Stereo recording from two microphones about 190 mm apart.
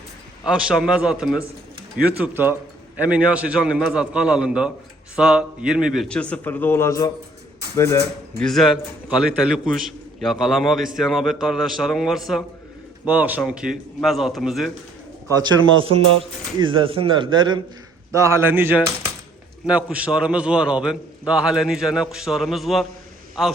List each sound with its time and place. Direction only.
0.7 s a man's voice: 5° right (ahead or behind); by 7.1 s 15° left (ahead or behind)
8.4 s a man's voice: centre (ahead or behind)
15.3 s a man's voice: 25° right (ahead or behind); by 22.9 s centre (ahead or behind)